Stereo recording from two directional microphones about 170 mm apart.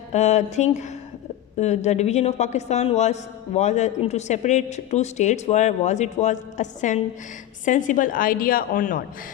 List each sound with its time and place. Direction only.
0.1 s a woman's voice: 45° left (ahead or behind)